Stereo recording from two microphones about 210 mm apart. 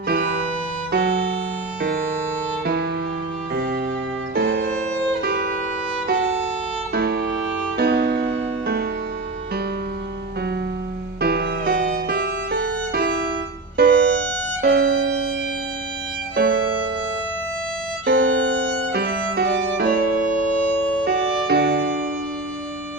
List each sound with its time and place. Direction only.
1.8 s music: 50° right (ahead or behind)
3.5 s music: 50° right (ahead or behind)
6.9 s music: 50° right (ahead or behind)
11.2 s music: 50° right (ahead or behind)
16.3 s violin: 50° right (ahead or behind)
18.0 s music: 55° right (ahead or behind)